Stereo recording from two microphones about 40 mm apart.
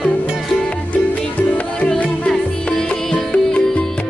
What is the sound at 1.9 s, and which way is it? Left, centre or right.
Music, left.